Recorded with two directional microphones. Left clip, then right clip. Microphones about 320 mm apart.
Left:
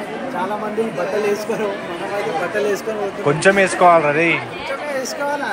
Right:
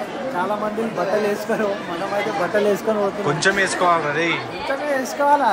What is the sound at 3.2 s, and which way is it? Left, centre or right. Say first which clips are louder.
A man's voice: left 7 dB; centre.